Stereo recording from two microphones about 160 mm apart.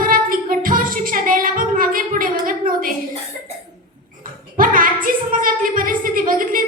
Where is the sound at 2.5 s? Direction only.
60° right (ahead or behind).